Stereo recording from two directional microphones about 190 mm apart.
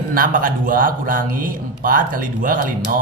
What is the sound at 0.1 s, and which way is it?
A man's voice, 45° right (ahead or behind).